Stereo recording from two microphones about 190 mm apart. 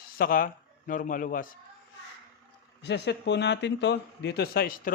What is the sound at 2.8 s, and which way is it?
Speech, 65° left (ahead or behind).